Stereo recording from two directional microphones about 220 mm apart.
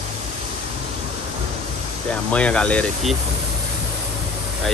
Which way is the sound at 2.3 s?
5° left (ahead or behind).